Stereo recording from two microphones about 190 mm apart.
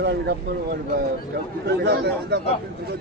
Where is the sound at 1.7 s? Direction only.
60° right (ahead or behind).